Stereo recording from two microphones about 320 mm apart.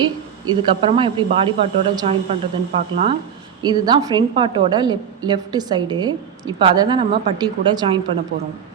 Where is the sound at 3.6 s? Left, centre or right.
Centre.